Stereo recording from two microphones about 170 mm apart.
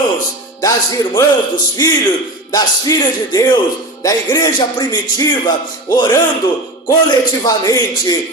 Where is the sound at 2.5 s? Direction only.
20° left (ahead or behind).